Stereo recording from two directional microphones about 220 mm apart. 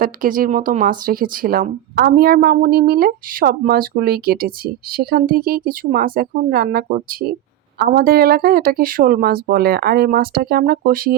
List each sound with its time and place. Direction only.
0.0 s speech: 40° right (ahead or behind)